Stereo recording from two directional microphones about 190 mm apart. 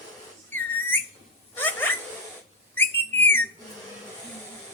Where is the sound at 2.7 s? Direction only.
10° left (ahead or behind).